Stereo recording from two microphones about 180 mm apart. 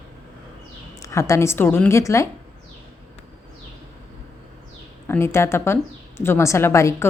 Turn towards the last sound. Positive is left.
turn(degrees=15)  # may be behind; listen again after turning